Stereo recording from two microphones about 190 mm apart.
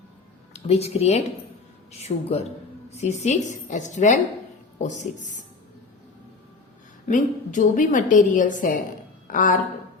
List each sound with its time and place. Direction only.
0.5 s a woman's voice: 35° left (ahead or behind)
7.1 s a woman's voice: 40° left (ahead or behind)